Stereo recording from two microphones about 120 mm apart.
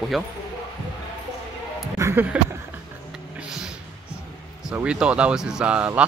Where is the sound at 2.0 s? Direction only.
25° right (ahead or behind).